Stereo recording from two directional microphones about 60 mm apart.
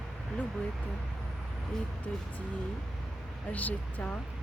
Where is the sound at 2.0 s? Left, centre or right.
Left.